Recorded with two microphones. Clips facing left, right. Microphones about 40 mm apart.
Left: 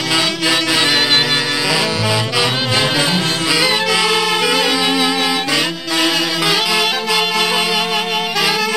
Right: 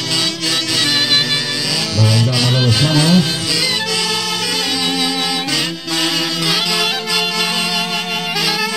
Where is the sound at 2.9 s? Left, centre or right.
Left.